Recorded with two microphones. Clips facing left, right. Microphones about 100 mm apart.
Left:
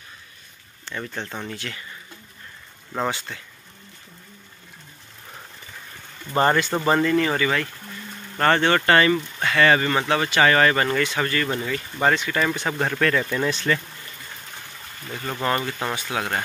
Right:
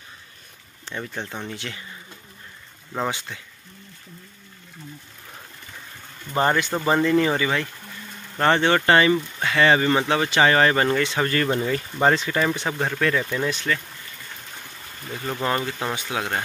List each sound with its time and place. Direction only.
0.9 s speech: 15° right (ahead or behind)
3.1 s speech: 15° right (ahead or behind)
6.3 s speech: 5° right (ahead or behind); by 12.4 s 25° right (ahead or behind)
12.4 s speech: 10° right (ahead or behind)
15.0 s speech: 5° right (ahead or behind)
15.9 s speech: 15° right (ahead or behind)